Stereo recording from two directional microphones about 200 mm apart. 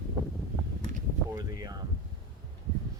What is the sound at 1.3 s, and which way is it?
Speech, 20° right (ahead or behind).